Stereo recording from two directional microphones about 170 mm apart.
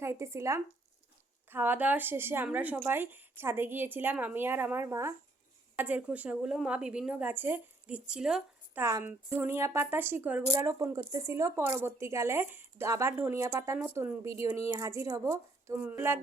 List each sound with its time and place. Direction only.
0.0 s speech: 15° right (ahead or behind)
8.8 s speech: 15° right (ahead or behind)